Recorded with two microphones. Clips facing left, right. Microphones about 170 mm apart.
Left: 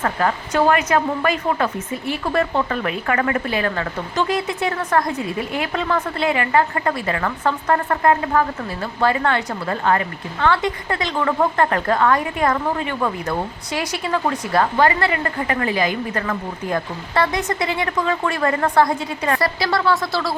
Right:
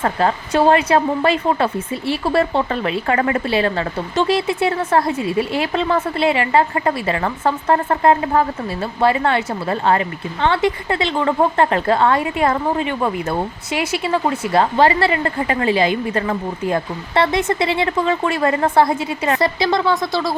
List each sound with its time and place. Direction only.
0.0 s a woman's voice: 30° right (ahead or behind)